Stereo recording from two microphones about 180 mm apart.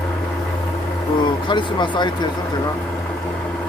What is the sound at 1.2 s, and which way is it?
Speech, 25° left (ahead or behind).